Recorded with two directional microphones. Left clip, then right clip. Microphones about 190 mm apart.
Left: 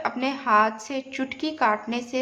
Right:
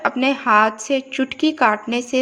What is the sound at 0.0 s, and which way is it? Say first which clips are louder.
A woman's voice: right 8 dB; 30° right (ahead or behind).